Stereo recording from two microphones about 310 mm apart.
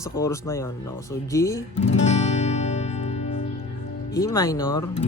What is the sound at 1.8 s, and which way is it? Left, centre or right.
Music, left.